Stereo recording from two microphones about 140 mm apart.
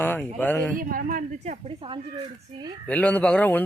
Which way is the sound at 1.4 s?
45° right (ahead or behind).